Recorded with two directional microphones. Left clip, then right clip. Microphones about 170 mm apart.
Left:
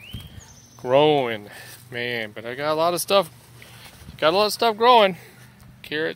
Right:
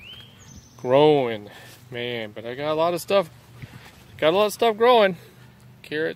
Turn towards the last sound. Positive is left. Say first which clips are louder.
# even
turn(degrees=-10)  # may be behind; listen again after turning